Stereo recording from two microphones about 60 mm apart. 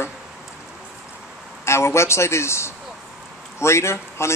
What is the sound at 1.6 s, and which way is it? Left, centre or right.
Speech, left.